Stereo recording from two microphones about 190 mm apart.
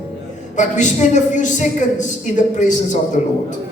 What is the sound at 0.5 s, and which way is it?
A woman's voice, 40° left (ahead or behind).